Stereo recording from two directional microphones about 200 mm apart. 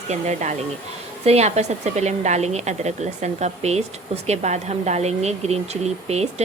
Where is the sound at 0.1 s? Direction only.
35° right (ahead or behind).